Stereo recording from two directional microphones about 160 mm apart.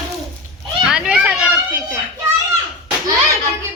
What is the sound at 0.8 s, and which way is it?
Speech, 5° right (ahead or behind).